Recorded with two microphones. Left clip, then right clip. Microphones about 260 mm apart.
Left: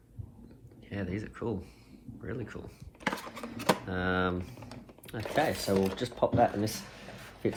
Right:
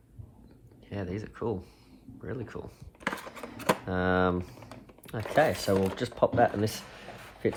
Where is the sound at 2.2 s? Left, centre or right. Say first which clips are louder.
Right 2 dB; centre.